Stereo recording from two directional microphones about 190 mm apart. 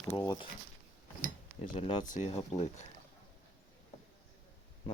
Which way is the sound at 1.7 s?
40° left (ahead or behind).